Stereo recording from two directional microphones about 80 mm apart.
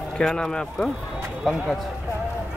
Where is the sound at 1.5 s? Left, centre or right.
Centre.